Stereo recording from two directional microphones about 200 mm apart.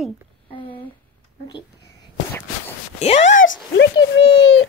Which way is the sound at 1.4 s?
20° left (ahead or behind).